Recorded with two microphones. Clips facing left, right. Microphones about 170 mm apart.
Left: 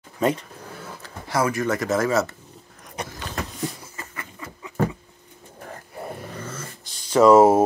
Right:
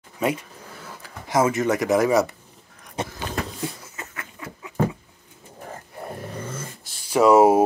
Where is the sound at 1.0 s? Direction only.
20° right (ahead or behind).